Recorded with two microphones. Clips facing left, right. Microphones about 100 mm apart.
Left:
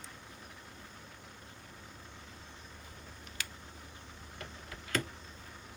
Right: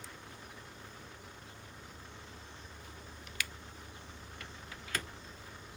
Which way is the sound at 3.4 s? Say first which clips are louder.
Right 3 dB; 30° left (ahead or behind).